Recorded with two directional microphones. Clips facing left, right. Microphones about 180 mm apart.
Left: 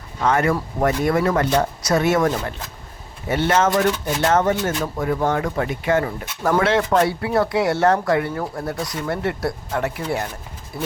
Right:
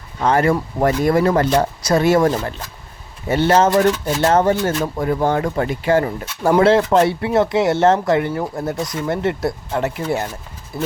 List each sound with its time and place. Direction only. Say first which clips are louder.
0.2 s speech: right 3 dB; 30° right (ahead or behind)